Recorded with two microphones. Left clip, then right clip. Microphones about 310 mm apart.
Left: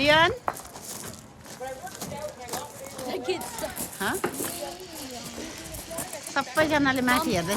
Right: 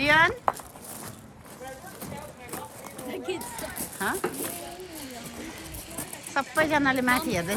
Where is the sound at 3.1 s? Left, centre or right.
Left.